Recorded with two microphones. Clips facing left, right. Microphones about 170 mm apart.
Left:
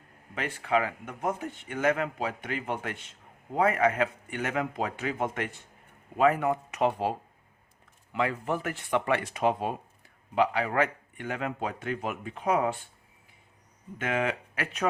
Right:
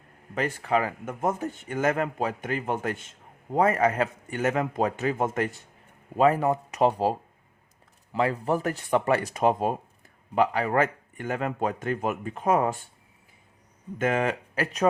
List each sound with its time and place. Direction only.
0.3 s a man's voice: 40° right (ahead or behind)
14.0 s a man's voice: 40° right (ahead or behind)